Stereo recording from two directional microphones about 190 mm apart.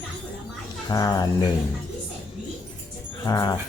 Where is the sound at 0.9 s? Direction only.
20° left (ahead or behind).